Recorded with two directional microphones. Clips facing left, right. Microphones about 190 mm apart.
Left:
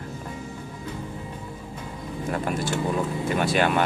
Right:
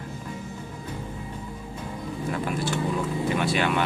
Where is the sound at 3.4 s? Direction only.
45° left (ahead or behind).